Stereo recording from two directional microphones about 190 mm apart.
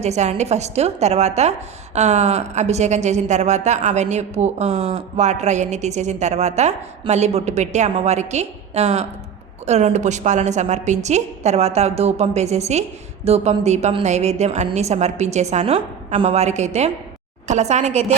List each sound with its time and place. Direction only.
0.0 s speech: 35° right (ahead or behind)